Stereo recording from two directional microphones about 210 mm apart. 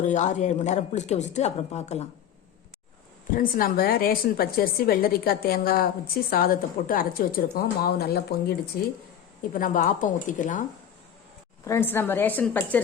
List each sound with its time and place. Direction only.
0.0 s a woman's voice: 35° left (ahead or behind)
3.3 s a woman's voice: 45° left (ahead or behind)
11.6 s a woman's voice: 10° left (ahead or behind)